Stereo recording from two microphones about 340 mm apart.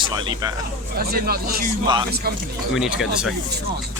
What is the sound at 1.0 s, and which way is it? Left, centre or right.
Speech, right.